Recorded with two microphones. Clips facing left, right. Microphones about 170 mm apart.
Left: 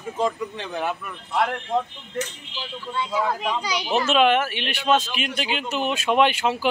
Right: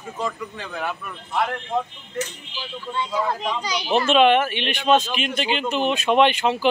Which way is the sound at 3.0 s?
5° left (ahead or behind).